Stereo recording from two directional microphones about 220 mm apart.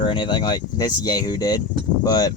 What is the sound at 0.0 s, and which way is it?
Speech, 20° left (ahead or behind).